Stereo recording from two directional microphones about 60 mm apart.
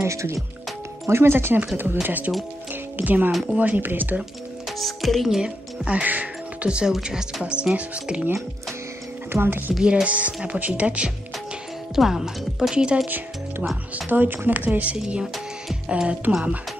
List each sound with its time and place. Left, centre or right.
0.0 s speech: right
1.0 s speech: right
2.0 s speech: right
2.7 s music: right
3.3 s speech: centre
3.5 s speech: right
4.6 s speech: centre
5.4 s speech: right
9.3 s speech: right
9.8 s speech: centre
10.0 s speech: right
11.9 s speech: centre
13.9 s speech: right; by 16.5 s centre